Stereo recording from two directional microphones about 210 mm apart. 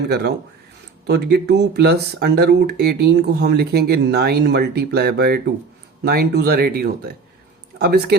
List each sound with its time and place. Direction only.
0.1 s speech: 50° right (ahead or behind)